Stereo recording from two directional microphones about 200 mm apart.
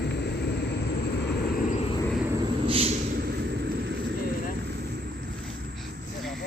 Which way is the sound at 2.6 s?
30° right (ahead or behind).